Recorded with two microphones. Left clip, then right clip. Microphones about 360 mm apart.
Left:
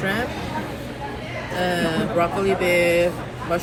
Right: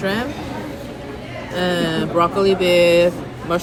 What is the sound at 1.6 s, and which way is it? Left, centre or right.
Mantra, centre.